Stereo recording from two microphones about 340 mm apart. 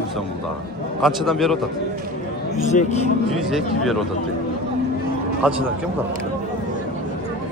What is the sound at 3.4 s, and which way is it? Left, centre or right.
Speech, centre.